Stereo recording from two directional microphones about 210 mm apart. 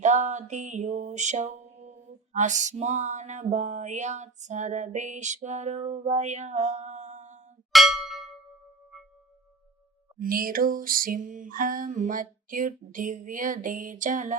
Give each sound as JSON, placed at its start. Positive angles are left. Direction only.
{"t": 0.0, "sound": "mantra", "side_deg": -35}
{"t": 7.7, "sound": "a sound", "side_deg": 0}
{"t": 10.2, "sound": "mantra", "side_deg": -45}